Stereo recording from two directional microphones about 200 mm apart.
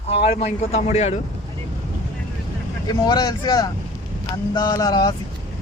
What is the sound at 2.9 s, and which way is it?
Speech, 20° left (ahead or behind).